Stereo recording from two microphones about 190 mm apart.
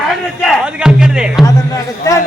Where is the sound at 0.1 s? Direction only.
Centre (ahead or behind).